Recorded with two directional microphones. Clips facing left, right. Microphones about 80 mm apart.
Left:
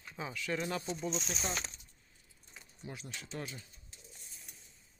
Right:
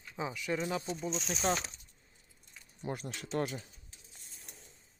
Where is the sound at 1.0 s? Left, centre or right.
Centre.